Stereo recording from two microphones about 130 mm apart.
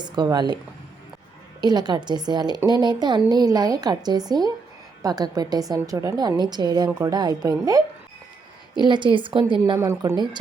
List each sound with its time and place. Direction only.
0.0 s a woman's voice: 35° right (ahead or behind)
1.6 s a woman's voice: 35° right (ahead or behind)
8.8 s a woman's voice: 35° right (ahead or behind)
9.7 s a woman's voice: 20° right (ahead or behind)